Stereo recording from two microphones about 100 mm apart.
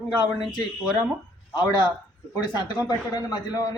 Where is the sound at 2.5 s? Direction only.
45° left (ahead or behind).